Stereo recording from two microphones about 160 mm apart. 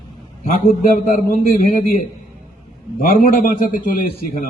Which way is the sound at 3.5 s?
60° left (ahead or behind).